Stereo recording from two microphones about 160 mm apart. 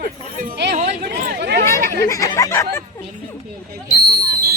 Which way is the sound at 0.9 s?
85° right.